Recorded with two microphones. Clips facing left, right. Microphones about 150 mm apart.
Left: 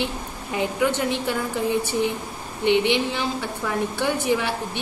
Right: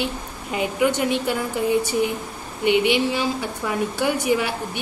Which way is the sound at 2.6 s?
10° right (ahead or behind).